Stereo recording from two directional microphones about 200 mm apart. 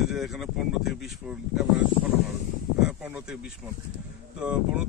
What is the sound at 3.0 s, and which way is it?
Speech, 5° right (ahead or behind).